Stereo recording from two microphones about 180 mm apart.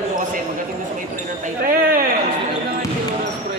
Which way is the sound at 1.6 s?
50° right (ahead or behind).